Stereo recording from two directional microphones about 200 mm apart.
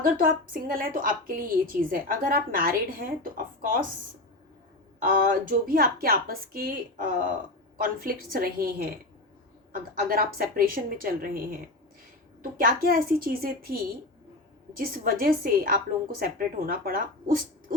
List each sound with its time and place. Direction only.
0.0 s a woman's voice: 45° right (ahead or behind)
4.9 s a woman's voice: 45° right (ahead or behind)
9.9 s a woman's voice: 45° right (ahead or behind)
14.8 s a woman's voice: 50° right (ahead or behind)